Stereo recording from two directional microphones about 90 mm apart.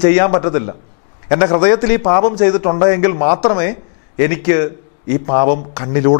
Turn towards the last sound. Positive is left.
turn(degrees=15)  # may be behind; listen again after turning